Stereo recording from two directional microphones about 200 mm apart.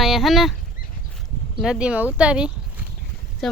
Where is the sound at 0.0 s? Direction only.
Centre (ahead or behind).